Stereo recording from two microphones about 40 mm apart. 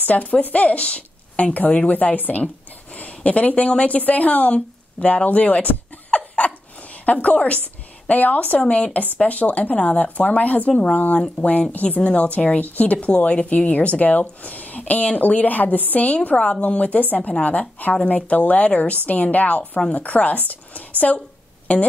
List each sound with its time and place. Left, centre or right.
0.0 s a woman's voice: left
5.0 s a sound: left
8.1 s speech: left
11.4 s speech: left
11.7 s a woman's voice: left
17.3 s speech: left